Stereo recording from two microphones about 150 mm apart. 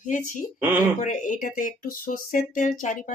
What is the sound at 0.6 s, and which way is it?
Speech, 15° right (ahead or behind).